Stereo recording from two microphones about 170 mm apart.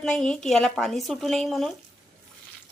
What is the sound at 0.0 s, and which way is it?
Speech, 5° left (ahead or behind).